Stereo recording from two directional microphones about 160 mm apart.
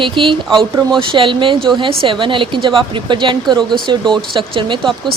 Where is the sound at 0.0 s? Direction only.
30° right (ahead or behind).